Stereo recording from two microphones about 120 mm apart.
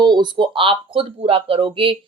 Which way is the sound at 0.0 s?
40° right (ahead or behind).